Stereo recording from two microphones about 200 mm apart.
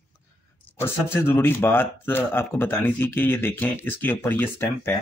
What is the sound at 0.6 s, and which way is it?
Speech, 10° left (ahead or behind).